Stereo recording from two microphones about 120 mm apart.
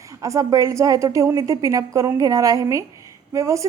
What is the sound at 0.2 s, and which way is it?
A woman's voice, 25° right (ahead or behind).